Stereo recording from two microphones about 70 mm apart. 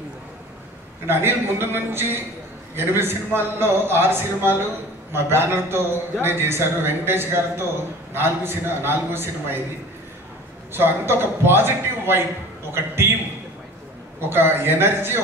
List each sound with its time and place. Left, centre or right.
1.0 s a man's voice: right
10.7 s a man's voice: right
14.3 s a man's voice: right